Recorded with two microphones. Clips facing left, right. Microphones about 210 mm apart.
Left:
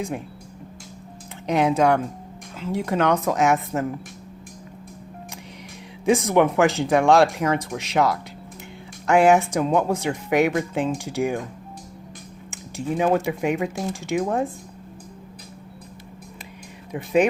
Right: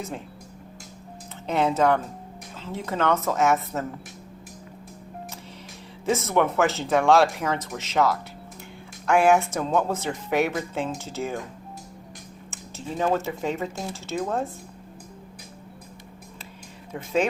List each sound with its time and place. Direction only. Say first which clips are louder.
1.5 s speech: left 3 dB; 15° left (ahead or behind)
6.1 s speech: left 5 dB; 15° left (ahead or behind)
12.5 s speech: left 8 dB; 15° left (ahead or behind)
16.9 s speech: left 5 dB; 15° left (ahead or behind)